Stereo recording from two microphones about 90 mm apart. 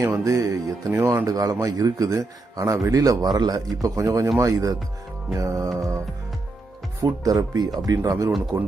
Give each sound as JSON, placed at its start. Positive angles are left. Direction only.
{"t": 0.0, "sound": "a man's voice", "side_deg": -35}
{"t": 7.0, "sound": "a man's voice", "side_deg": -40}
{"t": 8.5, "sound": "speech", "side_deg": -50}